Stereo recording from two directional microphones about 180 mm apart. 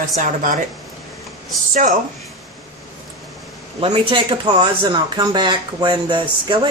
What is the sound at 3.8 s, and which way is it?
Speech, 30° right (ahead or behind).